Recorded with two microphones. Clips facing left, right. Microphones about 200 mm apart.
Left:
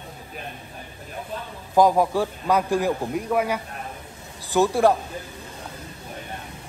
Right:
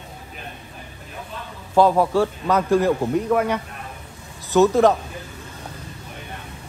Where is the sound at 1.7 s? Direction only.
15° left (ahead or behind).